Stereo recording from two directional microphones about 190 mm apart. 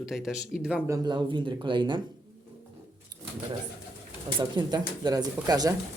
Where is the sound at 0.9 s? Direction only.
20° right (ahead or behind).